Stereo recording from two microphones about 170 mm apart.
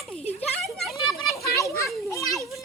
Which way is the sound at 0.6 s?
Centre (ahead or behind).